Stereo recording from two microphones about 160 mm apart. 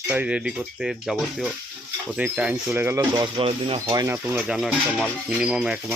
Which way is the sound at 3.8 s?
20° right (ahead or behind).